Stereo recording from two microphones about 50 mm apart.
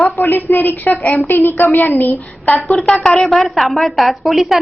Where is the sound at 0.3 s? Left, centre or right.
Left.